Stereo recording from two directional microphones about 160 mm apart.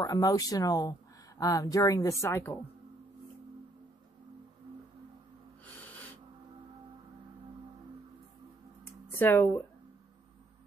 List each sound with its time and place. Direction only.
0.0 s speech: 25° left (ahead or behind)
5.7 s snort: 10° left (ahead or behind)
9.2 s speech: 10° left (ahead or behind)